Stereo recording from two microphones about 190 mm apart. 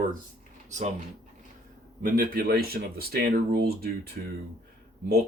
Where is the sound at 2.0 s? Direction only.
50° right (ahead or behind).